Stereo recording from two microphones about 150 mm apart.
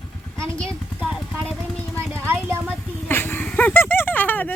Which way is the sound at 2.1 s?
15° right (ahead or behind).